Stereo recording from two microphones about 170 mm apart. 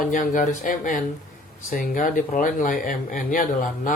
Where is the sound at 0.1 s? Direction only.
50° left (ahead or behind).